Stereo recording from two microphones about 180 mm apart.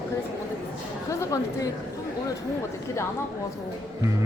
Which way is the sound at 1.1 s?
20° left (ahead or behind).